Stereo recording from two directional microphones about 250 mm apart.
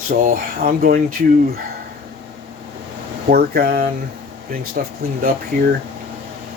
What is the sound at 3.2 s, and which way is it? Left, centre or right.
Speech, right.